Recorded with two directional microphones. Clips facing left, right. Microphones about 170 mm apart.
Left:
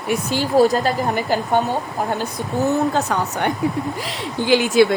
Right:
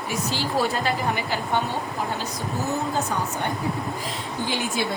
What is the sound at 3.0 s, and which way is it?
Speech, 70° left (ahead or behind).